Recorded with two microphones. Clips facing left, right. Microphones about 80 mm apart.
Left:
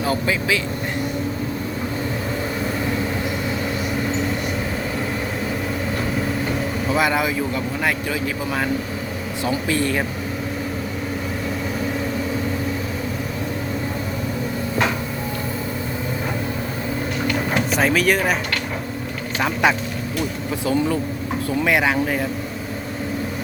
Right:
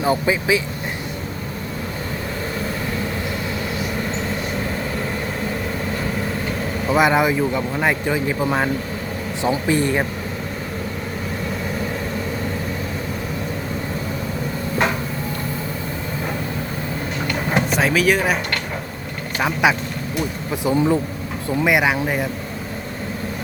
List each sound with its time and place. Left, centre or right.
0.0 s speech: centre
6.9 s speech: right
17.7 s speech: centre
20.7 s speech: right